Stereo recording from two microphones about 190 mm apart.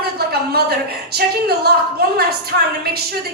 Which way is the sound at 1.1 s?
55° right (ahead or behind).